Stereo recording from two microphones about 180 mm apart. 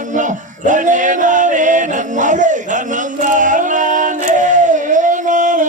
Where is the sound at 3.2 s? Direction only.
45° right (ahead or behind).